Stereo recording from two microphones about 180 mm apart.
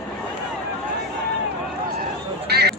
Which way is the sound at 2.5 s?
65° right (ahead or behind).